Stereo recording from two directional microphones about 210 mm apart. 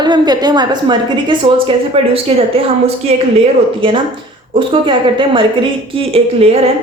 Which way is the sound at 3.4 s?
25° right (ahead or behind).